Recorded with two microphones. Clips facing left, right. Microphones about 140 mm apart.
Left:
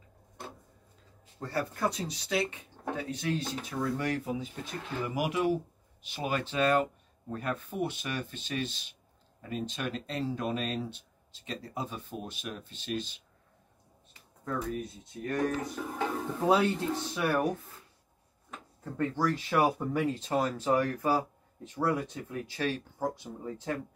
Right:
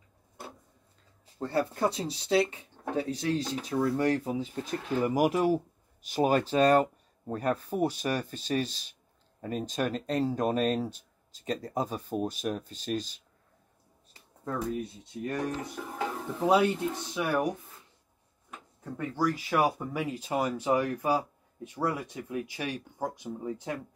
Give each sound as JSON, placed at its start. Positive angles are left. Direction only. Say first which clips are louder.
{"t": 1.2, "sound": "speech", "louder": "right 5 dB", "side_deg": -25}
{"t": 14.1, "sound": "speech", "louder": "right 1 dB", "side_deg": -30}